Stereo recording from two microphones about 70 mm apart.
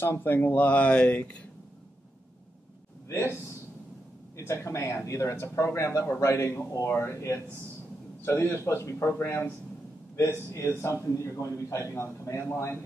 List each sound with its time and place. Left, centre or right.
0.0 s speech: left
4.4 s a man's voice: left
10.5 s a man's voice: left